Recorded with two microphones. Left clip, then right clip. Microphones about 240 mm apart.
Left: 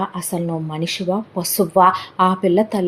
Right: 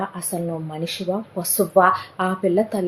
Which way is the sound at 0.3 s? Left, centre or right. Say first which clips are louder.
Left 3 dB; left.